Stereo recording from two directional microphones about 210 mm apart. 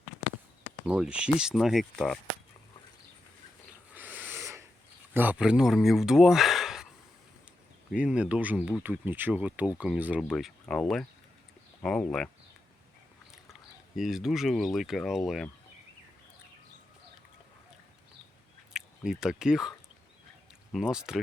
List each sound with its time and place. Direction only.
0.9 s speech: 5° right (ahead or behind)
3.9 s owl: 5° right (ahead or behind)
5.1 s speech: 10° right (ahead or behind)
7.9 s speech: 5° right (ahead or behind)
13.3 s speech: centre (ahead or behind)
18.7 s speech: 5° right (ahead or behind)
20.7 s speech: 5° right (ahead or behind)